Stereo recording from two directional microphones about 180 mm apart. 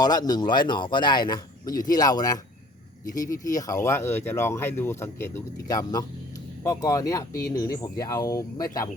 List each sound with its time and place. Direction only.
0.0 s speech: 20° left (ahead or behind)